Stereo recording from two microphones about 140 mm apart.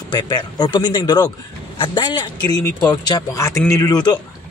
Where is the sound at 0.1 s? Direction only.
30° left (ahead or behind).